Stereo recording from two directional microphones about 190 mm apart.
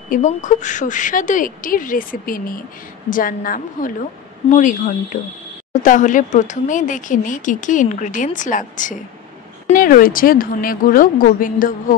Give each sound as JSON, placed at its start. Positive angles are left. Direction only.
{"t": 0.1, "sound": "speech", "side_deg": 40}